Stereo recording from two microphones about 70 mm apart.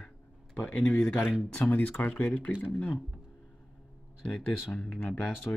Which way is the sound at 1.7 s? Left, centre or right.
Left.